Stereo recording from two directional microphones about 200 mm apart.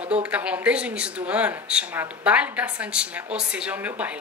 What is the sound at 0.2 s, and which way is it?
A woman's voice, 5° right (ahead or behind).